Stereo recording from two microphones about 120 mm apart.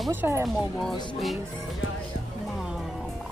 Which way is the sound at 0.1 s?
20° right (ahead or behind).